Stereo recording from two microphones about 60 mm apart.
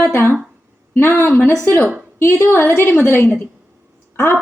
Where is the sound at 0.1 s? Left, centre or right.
Left.